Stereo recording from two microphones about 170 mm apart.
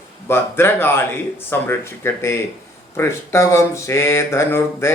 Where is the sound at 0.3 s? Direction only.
15° left (ahead or behind).